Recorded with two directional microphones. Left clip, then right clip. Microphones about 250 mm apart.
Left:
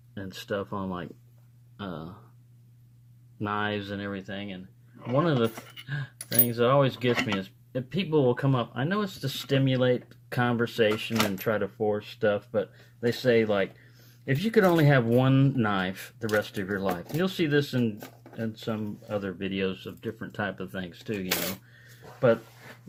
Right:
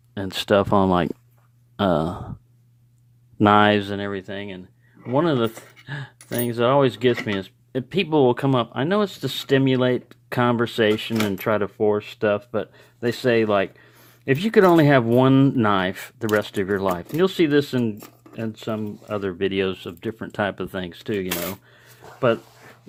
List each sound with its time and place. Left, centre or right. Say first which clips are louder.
0.1 s speech: right 13 dB; right
3.3 s speech: right 14 dB; right